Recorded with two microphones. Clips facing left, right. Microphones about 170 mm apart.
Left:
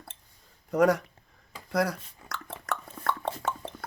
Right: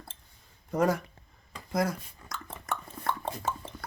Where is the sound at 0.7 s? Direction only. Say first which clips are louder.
Left 4 dB; 70° left (ahead or behind).